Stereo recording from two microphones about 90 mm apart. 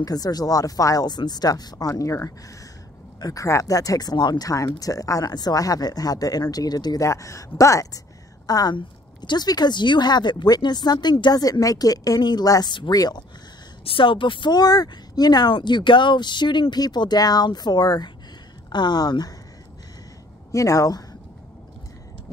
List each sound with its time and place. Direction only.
0.0 s speech: 45° left (ahead or behind)
7.1 s speech: 35° left (ahead or behind)
8.7 s speech: 60° left (ahead or behind)
13.8 s speech: 70° left (ahead or behind); by 19.3 s 50° left (ahead or behind)
20.5 s speech: 35° left (ahead or behind)